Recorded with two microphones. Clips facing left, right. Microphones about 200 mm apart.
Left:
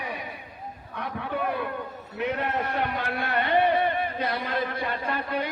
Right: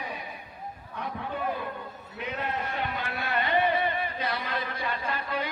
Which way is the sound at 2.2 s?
60° left (ahead or behind).